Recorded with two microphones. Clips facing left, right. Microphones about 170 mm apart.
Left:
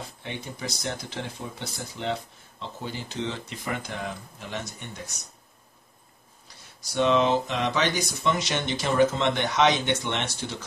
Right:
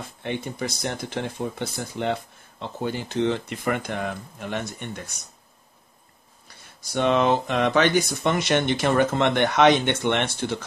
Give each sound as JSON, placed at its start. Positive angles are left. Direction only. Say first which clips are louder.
{"t": 0.2, "sound": "speech", "louder": "right 8 dB", "side_deg": -55}
{"t": 6.4, "sound": "speech", "louder": "right 2 dB", "side_deg": -55}